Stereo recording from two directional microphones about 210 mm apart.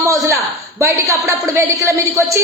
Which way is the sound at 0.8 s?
15° right (ahead or behind).